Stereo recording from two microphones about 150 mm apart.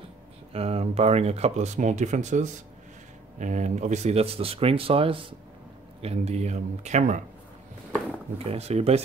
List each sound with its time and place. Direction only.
0.5 s speech: 40° right (ahead or behind)
8.5 s speech: 45° right (ahead or behind)